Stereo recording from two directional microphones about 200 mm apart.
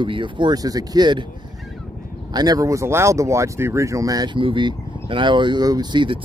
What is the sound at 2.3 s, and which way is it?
Speech, 20° right (ahead or behind).